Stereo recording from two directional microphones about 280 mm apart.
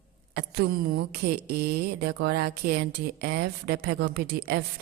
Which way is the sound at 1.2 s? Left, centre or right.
Right.